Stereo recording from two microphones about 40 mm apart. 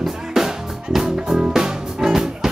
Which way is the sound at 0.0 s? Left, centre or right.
Centre.